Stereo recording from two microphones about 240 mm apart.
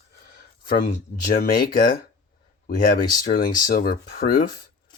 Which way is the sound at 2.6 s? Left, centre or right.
Left.